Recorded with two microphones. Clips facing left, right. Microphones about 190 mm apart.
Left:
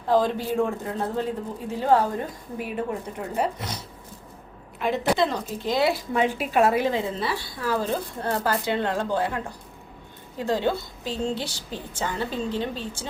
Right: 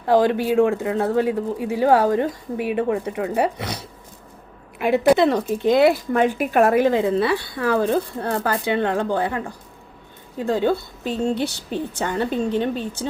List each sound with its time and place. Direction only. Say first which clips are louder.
0.2 s speech: right 6 dB; 75° right (ahead or behind)
4.9 s speech: right 7 dB; 60° right (ahead or behind)
10.7 s speech: right 4 dB; 60° right (ahead or behind)